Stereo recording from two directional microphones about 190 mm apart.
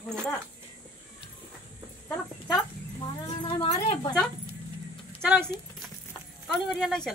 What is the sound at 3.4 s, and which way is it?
Speech, 20° left (ahead or behind).